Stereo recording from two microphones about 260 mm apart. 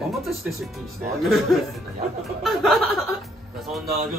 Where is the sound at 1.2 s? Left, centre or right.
Centre.